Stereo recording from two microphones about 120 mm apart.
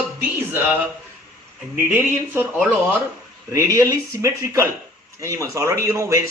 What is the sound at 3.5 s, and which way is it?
Speech, 25° right (ahead or behind).